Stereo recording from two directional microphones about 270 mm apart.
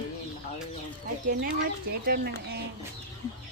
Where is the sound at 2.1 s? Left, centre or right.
Right.